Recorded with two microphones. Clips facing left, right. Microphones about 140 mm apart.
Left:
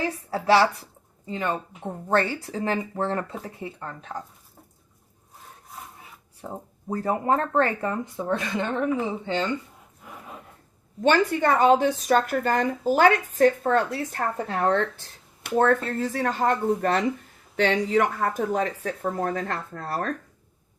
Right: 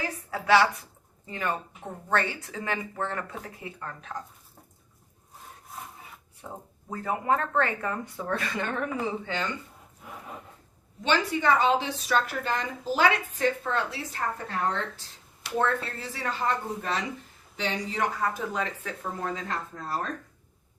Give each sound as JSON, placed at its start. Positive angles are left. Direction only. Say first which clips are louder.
{"t": 0.3, "sound": "speech", "louder": "left 2 dB", "side_deg": 35}
{"t": 1.3, "sound": "speech", "louder": "left 3 dB", "side_deg": 20}
{"t": 2.0, "sound": "speech", "louder": "left 5 dB", "side_deg": 35}
{"t": 6.4, "sound": "speech", "louder": "left 6 dB", "side_deg": 35}
{"t": 10.0, "sound": "a sound", "louder": "even", "side_deg": 0}
{"t": 11.0, "sound": "speech", "louder": "left 5 dB", "side_deg": 50}
{"t": 15.4, "sound": "speech", "louder": "left 6 dB", "side_deg": 50}
{"t": 17.6, "sound": "speech", "louder": "left 8 dB", "side_deg": 65}